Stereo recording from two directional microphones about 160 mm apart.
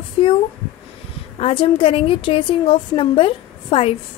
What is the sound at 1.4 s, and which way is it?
A woman's voice, 35° left (ahead or behind).